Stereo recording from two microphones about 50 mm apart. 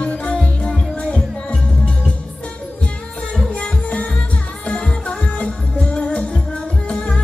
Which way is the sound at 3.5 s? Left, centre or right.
Left.